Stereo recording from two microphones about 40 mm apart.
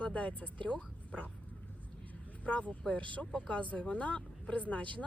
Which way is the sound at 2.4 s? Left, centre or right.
Left.